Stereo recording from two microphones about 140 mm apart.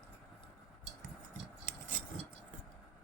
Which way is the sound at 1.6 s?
70° right (ahead or behind).